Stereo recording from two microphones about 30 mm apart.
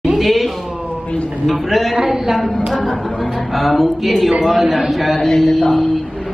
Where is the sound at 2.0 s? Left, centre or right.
Centre.